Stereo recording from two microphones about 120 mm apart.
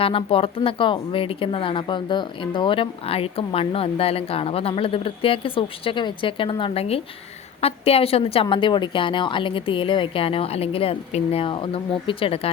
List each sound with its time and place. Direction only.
0.0 s speech: 50° left (ahead or behind)